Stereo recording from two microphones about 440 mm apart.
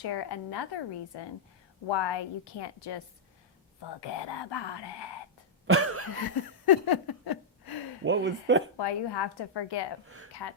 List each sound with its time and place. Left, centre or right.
0.0 s a woman's voice: left
5.6 s cough: right
6.1 s a sound: left
8.0 s speech: right
8.8 s a woman's voice: left